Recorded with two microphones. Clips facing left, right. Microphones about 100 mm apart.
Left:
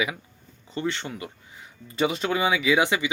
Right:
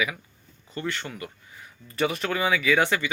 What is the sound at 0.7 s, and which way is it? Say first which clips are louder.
Speech: left 3 dB; 20° left (ahead or behind).